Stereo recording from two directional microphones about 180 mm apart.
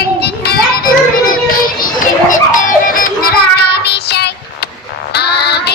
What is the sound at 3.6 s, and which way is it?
Child singing, 65° left (ahead or behind).